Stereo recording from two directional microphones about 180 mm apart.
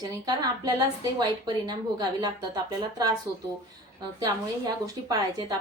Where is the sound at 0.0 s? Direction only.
20° right (ahead or behind).